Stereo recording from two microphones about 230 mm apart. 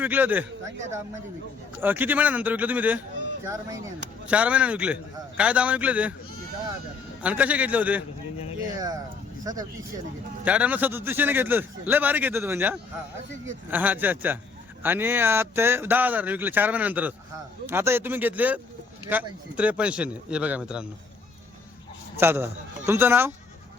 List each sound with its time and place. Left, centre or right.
0.0 s a man's voice: centre
1.8 s a man's voice: centre
4.3 s speech: centre
7.2 s a man's voice: centre
22.2 s a man's voice: centre